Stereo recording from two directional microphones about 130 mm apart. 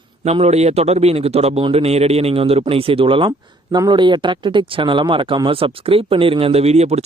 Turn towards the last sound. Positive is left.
turn(degrees=-55)  # may be behind; listen again after turning